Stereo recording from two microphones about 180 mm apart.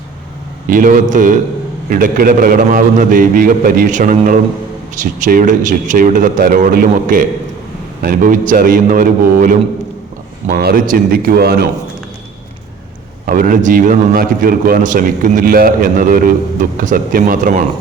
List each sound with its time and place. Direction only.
0.7 s a man's voice: 50° right (ahead or behind)
10.6 s a man's voice: 55° right (ahead or behind)
13.2 s a man's voice: 50° right (ahead or behind)